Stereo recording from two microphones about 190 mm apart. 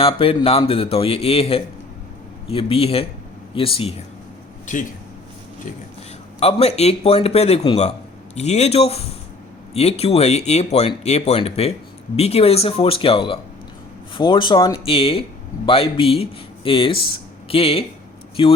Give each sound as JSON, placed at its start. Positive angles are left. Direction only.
{"t": 0.0, "sound": "speech", "side_deg": 30}
{"t": 4.7, "sound": "speech", "side_deg": 40}
{"t": 6.4, "sound": "speech", "side_deg": 35}